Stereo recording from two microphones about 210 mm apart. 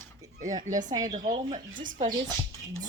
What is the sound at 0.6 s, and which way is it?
Speech, 35° right (ahead or behind).